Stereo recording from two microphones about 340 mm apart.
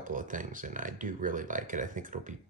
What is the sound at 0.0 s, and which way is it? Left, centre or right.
Speech, right.